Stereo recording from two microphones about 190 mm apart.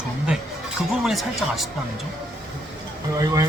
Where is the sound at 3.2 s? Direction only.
20° right (ahead or behind).